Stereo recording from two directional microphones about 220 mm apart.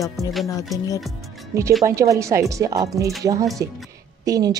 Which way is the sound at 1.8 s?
15° right (ahead or behind).